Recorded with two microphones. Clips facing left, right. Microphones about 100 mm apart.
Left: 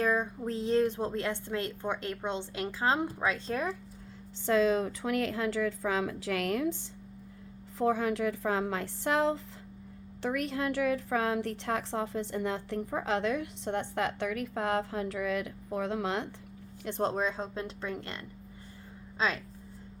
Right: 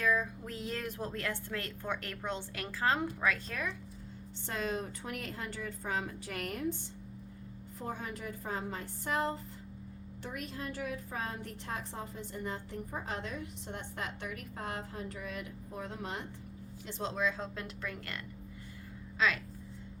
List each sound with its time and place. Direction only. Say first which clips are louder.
0.0 s a woman's voice: left 3 dB; 30° left (ahead or behind)
4.9 s a woman's voice: left 10 dB; 90° left
7.8 s a woman's voice: left 12 dB; 90° left
10.2 s a woman's voice: left 10 dB; 80° left
16.8 s a woman's voice: left 5 dB; 50° left (ahead or behind); by 19.4 s 30° left (ahead or behind)